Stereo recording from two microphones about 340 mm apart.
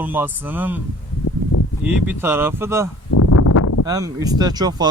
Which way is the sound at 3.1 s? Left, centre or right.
Left.